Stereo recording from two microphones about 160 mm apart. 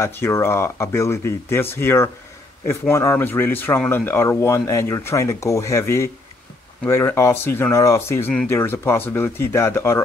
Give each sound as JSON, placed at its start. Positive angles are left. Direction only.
{"t": 0.0, "sound": "speech", "side_deg": 15}